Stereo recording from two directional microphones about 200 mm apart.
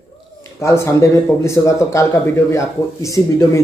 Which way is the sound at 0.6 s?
15° left (ahead or behind).